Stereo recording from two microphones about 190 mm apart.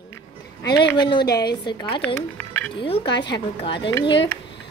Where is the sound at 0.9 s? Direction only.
25° left (ahead or behind).